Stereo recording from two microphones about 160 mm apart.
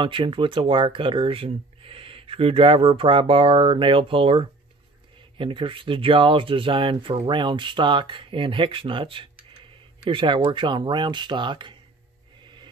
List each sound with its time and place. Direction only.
0.0 s speech: 30° right (ahead or behind)